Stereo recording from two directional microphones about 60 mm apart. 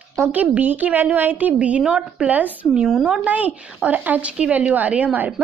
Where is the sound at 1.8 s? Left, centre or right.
Centre.